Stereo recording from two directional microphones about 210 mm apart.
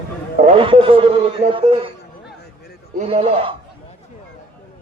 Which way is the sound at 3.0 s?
30° right (ahead or behind).